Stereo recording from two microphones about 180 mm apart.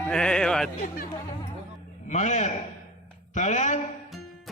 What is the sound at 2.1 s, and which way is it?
A man's voice, 40° left (ahead or behind).